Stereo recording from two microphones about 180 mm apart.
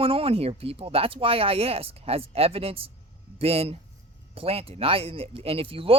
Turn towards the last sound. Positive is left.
turn(degrees=-30)  # may be behind; listen again after turning